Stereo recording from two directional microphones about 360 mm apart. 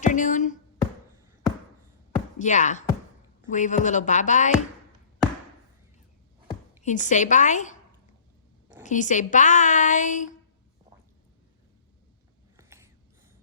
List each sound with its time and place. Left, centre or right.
0.0 s speech: left
2.4 s speech: centre
6.8 s speech: centre
8.8 s speech: left
12.5 s mechanisms: centre